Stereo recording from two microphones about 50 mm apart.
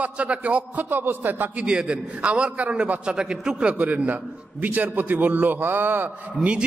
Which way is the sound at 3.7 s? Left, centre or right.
Right.